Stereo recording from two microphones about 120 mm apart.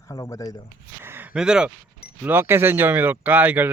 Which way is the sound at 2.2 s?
20° right (ahead or behind).